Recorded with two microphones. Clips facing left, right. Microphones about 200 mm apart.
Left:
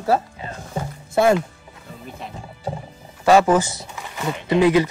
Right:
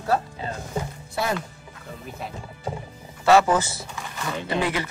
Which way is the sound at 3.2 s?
10° left (ahead or behind).